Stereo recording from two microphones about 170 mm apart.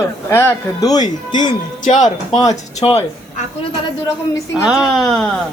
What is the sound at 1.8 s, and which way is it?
Speech, 45° left (ahead or behind).